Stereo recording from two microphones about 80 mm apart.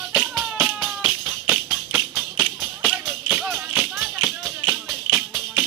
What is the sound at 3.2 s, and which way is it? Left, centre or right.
Music, centre.